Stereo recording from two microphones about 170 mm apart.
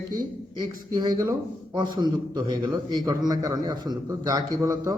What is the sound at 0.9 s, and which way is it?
A man's voice, 25° right (ahead or behind).